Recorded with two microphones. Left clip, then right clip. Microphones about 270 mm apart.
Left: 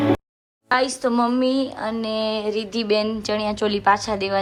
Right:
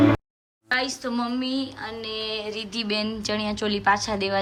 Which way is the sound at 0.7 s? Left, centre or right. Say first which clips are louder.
Left 6 dB; centre.